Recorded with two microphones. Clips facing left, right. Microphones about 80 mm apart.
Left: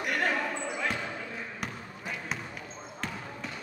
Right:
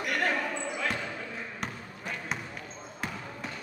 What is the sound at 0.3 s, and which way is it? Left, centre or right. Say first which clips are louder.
Basketball bounce: even; centre.